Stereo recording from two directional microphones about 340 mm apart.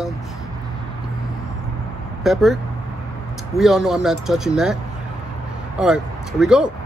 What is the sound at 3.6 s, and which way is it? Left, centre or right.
Speech, centre.